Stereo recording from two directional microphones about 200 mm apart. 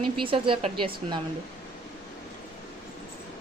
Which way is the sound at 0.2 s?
25° right (ahead or behind).